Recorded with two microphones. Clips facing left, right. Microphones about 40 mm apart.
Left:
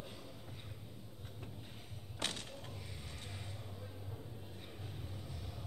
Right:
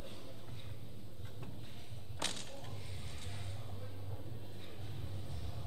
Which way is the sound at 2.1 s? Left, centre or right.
Centre.